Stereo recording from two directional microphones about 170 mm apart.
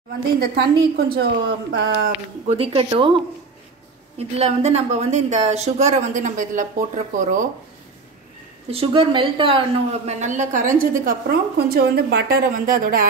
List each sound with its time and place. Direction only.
0.4 s a woman's voice: 70° right (ahead or behind)
2.4 s speech: 35° right (ahead or behind)
4.2 s speech: 40° right (ahead or behind)
8.6 s speech: 35° right (ahead or behind)
10.2 s a woman's voice: 45° right (ahead or behind)